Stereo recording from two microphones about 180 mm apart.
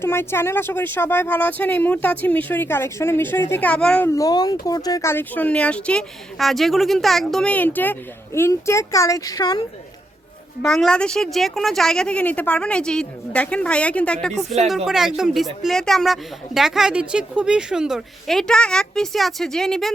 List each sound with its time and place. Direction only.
0.0 s speech: 15° left (ahead or behind)
4.1 s speech: 20° left (ahead or behind)
10.6 s speech: centre (ahead or behind)